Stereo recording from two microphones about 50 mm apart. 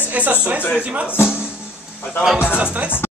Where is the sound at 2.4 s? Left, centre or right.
Right.